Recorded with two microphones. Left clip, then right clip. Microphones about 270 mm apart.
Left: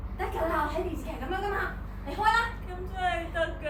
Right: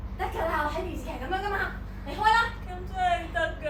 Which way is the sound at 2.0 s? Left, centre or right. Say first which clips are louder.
Right 2 dB; centre.